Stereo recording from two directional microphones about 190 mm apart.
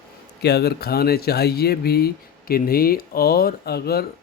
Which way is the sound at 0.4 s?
60° left (ahead or behind).